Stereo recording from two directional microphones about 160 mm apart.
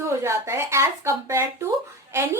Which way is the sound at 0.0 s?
15° right (ahead or behind).